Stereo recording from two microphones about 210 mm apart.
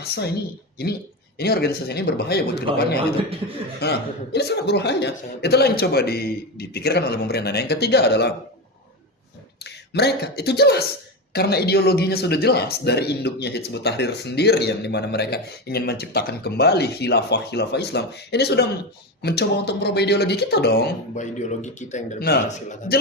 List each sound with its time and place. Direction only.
0.8 s speech: 50° left (ahead or behind)
3.8 s speech: 50° left (ahead or behind)
9.6 s speech: 50° left (ahead or behind)
21.2 s a man's voice: 35° left (ahead or behind)